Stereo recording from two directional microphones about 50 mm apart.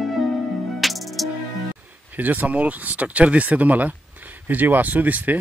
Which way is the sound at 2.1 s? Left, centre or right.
Right.